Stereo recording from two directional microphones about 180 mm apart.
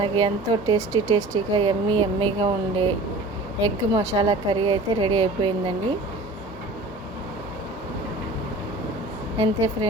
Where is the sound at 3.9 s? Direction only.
20° right (ahead or behind).